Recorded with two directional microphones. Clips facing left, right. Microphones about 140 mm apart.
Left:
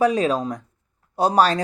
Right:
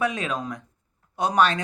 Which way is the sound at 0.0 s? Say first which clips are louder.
Left 8 dB; 35° left (ahead or behind).